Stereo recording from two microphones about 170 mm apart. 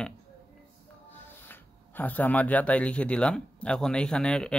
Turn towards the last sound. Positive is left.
turn(degrees=5)  # may be behind; listen again after turning